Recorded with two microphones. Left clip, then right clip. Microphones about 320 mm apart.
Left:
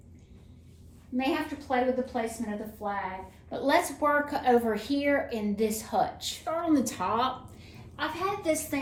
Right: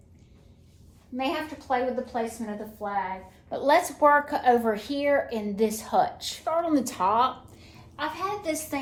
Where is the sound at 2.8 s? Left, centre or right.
Right.